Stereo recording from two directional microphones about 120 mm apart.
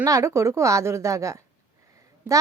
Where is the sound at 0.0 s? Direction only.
25° right (ahead or behind).